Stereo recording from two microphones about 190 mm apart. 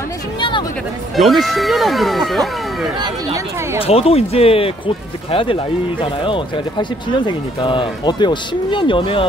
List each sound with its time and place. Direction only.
0.4 s a sound: 25° left (ahead or behind)
1.1 s speech: centre (ahead or behind)
3.8 s speech: 30° left (ahead or behind)